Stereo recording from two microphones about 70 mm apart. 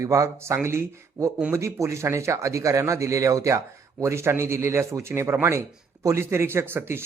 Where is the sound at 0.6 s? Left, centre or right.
Right.